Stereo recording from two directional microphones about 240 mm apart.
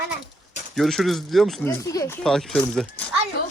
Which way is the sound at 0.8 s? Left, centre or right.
Centre.